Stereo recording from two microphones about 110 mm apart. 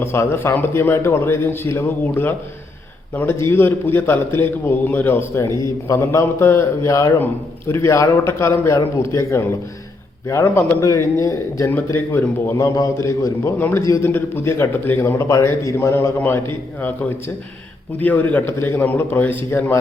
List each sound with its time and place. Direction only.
0.0 s a man's voice: 20° left (ahead or behind)